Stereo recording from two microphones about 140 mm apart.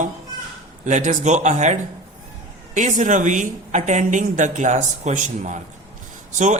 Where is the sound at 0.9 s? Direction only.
60° right (ahead or behind).